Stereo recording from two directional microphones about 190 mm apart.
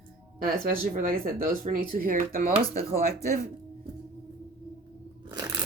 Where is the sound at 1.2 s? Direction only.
50° right (ahead or behind).